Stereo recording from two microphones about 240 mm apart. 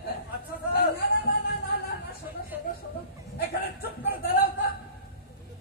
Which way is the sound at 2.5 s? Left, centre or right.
Centre.